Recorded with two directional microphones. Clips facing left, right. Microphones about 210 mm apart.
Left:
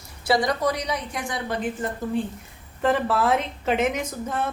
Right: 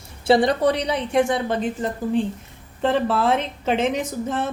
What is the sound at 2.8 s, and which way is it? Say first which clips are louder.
A woman's voice: right 2 dB; 25° right (ahead or behind).